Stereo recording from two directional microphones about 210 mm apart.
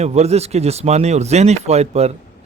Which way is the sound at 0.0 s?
30° right (ahead or behind).